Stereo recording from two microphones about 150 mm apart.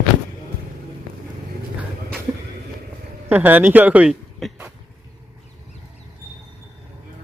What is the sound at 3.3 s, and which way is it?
Speech, 10° right (ahead or behind).